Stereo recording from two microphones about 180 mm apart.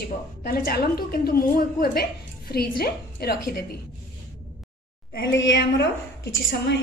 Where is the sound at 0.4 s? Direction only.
55° left (ahead or behind).